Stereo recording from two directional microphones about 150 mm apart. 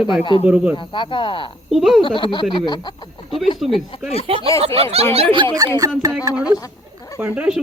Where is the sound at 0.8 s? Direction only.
35° left (ahead or behind).